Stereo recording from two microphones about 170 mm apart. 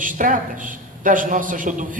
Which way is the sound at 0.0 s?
50° right (ahead or behind).